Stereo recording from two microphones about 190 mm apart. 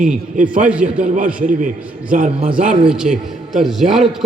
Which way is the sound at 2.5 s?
5° right (ahead or behind).